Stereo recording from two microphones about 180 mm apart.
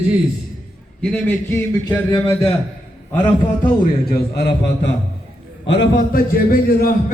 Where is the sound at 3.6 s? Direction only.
55° left (ahead or behind); by 4.9 s 70° left (ahead or behind).